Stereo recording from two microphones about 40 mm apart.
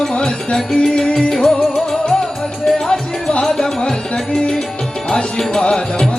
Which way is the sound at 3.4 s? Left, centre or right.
Centre.